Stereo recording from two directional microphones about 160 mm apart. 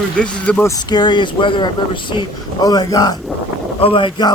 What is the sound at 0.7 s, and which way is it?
Speech, 25° left (ahead or behind).